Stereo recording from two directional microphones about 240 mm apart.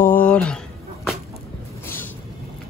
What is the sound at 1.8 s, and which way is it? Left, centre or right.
Vehicle, centre.